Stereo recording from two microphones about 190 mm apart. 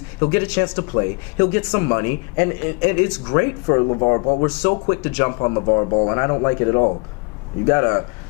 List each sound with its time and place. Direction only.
0.2 s speech: 15° left (ahead or behind)
3.8 s speech: 30° left (ahead or behind)
4.9 s speech: 15° left (ahead or behind); by 6.1 s 30° left (ahead or behind)
6.1 s speech: 20° left (ahead or behind)